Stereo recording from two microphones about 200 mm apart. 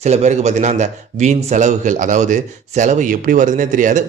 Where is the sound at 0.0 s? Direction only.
35° right (ahead or behind).